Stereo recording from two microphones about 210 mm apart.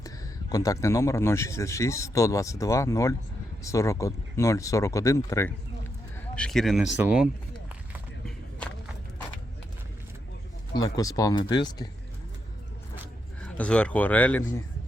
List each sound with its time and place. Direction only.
0.5 s speech: 15° left (ahead or behind); by 7.3 s 5° right (ahead or behind)
10.8 s speech: 15° left (ahead or behind)
13.4 s speech: 5° left (ahead or behind)